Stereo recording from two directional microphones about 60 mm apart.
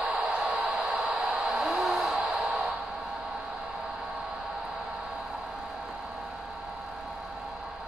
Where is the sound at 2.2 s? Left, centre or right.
Centre.